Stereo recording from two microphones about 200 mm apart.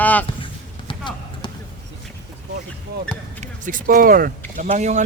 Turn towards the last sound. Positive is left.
turn(degrees=-35)  # may be behind; listen again after turning